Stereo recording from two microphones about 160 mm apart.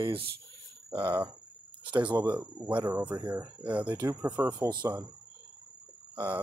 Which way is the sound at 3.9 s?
20° right (ahead or behind).